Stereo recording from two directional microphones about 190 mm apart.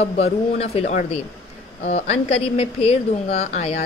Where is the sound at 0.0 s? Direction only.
35° left (ahead or behind).